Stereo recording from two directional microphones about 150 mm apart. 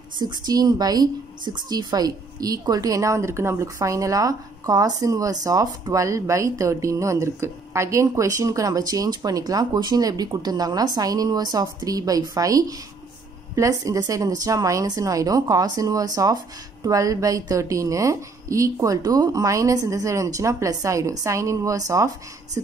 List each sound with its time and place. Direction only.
0.2 s speech: 25° right (ahead or behind)